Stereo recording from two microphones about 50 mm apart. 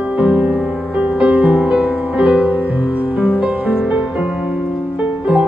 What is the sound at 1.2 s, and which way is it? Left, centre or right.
Music, right.